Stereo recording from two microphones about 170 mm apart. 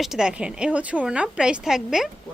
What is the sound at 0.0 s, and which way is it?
A woman's voice, 5° right (ahead or behind).